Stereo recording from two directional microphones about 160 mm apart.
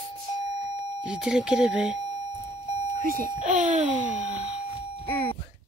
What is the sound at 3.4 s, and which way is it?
Speech, 50° right (ahead or behind).